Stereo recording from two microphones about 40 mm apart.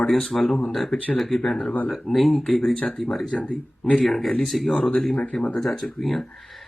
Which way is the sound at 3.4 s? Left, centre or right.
Left.